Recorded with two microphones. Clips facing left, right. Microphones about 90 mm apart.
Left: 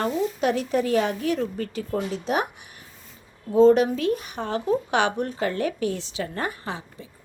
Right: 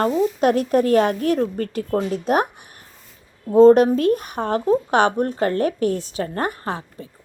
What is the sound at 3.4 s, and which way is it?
Speech, 45° right (ahead or behind).